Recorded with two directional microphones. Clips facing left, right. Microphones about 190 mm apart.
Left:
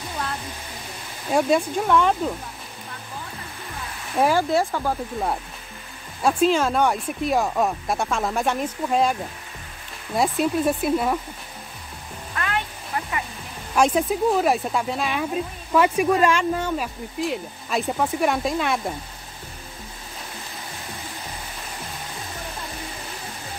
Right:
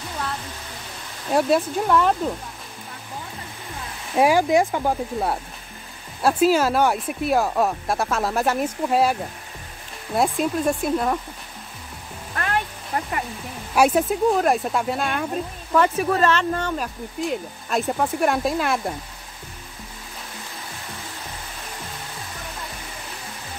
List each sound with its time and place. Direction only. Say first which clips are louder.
1.3 s speech: even; centre (ahead or behind)
4.2 s speech: right 3 dB; 15° right (ahead or behind)
6.2 s speech: right 1 dB; 5° right (ahead or behind)
12.4 s a sound: right 2 dB; 45° right (ahead or behind)
13.7 s speech: right 1 dB; 5° right (ahead or behind)